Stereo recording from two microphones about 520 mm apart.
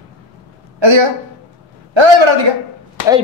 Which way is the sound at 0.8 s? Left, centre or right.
Right.